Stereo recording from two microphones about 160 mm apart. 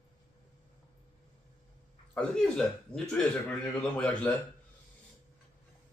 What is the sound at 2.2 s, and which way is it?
Speech, 5° left (ahead or behind).